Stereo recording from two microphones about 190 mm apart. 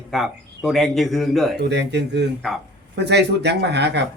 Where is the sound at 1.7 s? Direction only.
65° right (ahead or behind).